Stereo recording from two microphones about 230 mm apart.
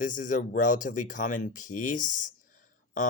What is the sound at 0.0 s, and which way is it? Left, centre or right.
Speech, left.